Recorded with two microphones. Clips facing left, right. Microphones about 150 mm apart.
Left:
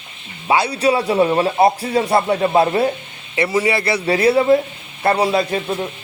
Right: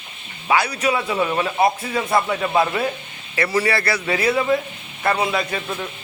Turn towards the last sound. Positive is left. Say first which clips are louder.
# left 6 dB
turn(degrees=30)  # may be behind; listen again after turning